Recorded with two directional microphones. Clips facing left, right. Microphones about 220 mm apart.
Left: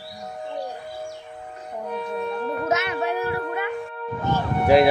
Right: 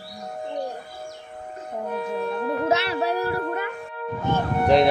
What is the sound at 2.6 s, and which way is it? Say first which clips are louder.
Music: right 1 dB; 30° right (ahead or behind).